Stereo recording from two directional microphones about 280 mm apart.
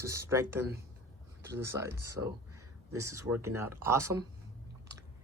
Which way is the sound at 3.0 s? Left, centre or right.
Right.